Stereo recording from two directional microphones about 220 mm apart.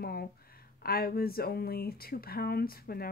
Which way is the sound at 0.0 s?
45° left (ahead or behind).